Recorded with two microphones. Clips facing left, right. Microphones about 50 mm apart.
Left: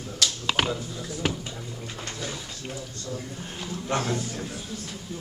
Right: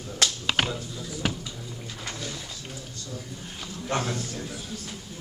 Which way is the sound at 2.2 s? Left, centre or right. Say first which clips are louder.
Left 2 dB; left.